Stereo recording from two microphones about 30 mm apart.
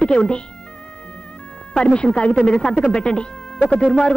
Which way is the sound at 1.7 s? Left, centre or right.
Left.